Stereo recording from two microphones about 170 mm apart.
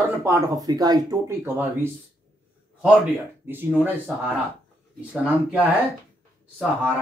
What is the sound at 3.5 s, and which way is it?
Speech, 10° right (ahead or behind).